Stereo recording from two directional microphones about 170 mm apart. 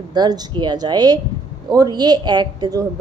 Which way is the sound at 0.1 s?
25° right (ahead or behind).